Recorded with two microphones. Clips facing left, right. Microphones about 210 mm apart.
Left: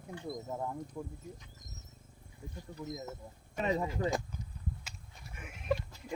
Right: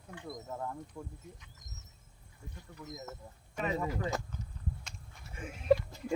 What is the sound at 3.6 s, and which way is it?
Speech, 30° left (ahead or behind).